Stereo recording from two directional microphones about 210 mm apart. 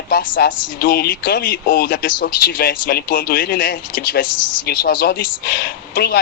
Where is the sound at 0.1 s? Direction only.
45° left (ahead or behind).